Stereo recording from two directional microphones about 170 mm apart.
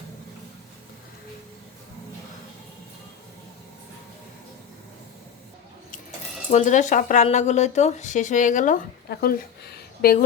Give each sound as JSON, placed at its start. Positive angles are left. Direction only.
{"t": 6.5, "sound": "speech", "side_deg": 45}
{"t": 9.0, "sound": "speech", "side_deg": 65}